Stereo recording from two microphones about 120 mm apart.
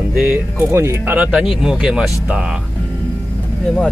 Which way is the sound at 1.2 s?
5° right (ahead or behind).